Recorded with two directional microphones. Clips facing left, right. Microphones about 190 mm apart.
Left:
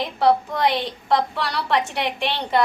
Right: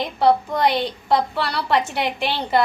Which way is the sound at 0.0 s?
Centre (ahead or behind).